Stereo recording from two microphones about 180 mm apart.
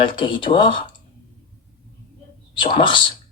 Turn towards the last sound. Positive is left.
turn(degrees=25)  # may be behind; listen again after turning